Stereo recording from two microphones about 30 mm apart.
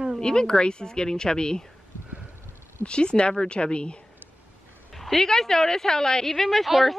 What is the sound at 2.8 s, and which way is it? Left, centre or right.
A woman's voice, left.